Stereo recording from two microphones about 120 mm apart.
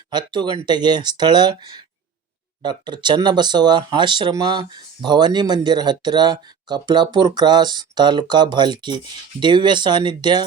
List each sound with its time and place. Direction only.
0.1 s speech: 40° right (ahead or behind)